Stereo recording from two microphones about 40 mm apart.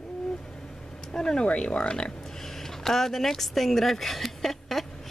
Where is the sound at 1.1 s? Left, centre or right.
Centre.